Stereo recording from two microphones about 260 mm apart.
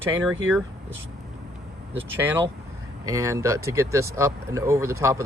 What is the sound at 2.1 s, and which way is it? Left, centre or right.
Speech, centre.